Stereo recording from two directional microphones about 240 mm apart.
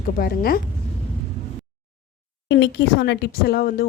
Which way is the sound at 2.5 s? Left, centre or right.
Left.